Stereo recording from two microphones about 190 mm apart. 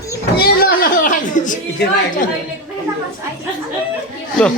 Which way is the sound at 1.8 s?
60° left (ahead or behind).